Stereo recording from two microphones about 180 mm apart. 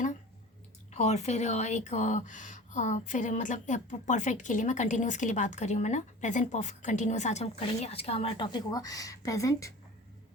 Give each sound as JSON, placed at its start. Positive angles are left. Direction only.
{"t": 0.9, "sound": "speech", "side_deg": 35}